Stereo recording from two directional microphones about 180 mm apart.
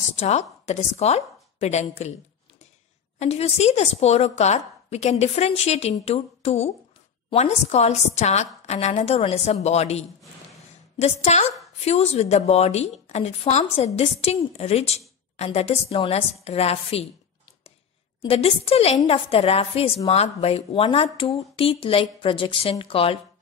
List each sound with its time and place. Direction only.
0.1 s a woman's voice: 40° left (ahead or behind)
3.2 s a woman's voice: 35° left (ahead or behind)
18.2 s a woman's voice: 30° left (ahead or behind)